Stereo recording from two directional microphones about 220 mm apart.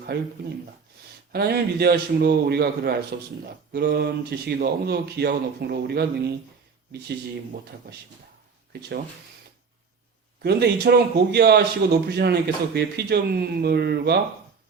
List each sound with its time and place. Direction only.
0.1 s a man's voice: 50° right (ahead or behind)
1.3 s a man's voice: 45° right (ahead or behind)
10.4 s a man's voice: 45° right (ahead or behind)